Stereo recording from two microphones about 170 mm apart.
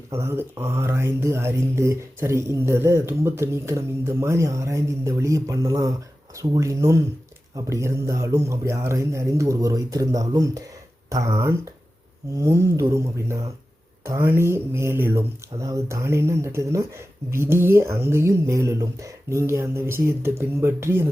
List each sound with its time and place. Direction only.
0.1 s speech: 15° right (ahead or behind)